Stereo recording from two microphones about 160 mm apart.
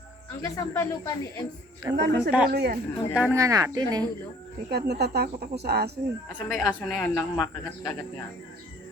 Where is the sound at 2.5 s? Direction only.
80° right.